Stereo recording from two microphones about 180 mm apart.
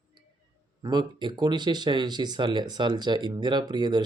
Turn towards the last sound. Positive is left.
turn(degrees=-25)  # may be behind; listen again after turning